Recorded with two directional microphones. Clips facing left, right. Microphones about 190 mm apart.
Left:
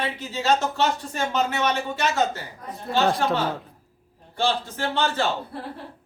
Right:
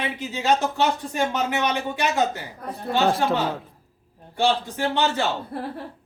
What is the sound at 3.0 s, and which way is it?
Speech, centre (ahead or behind).